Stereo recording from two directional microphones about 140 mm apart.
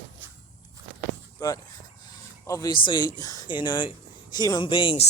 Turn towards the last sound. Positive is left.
turn(degrees=35)  # may be behind; listen again after turning